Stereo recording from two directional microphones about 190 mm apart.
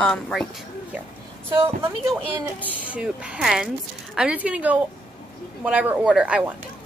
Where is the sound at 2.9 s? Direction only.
5° right (ahead or behind).